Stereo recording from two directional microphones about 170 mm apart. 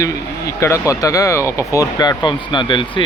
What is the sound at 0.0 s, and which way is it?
Speech, 15° left (ahead or behind).